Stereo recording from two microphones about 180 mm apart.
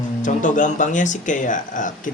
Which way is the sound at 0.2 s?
45° left (ahead or behind).